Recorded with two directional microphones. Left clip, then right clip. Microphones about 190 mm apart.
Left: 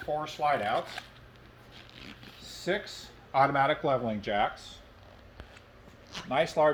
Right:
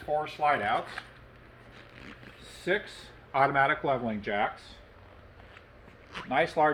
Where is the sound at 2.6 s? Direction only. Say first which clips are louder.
Right 2 dB; 65° left (ahead or behind).